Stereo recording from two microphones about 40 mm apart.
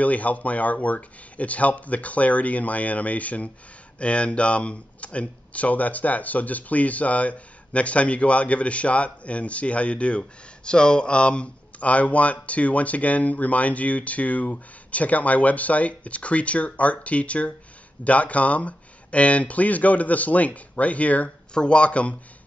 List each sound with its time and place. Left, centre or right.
0.0 s speech: left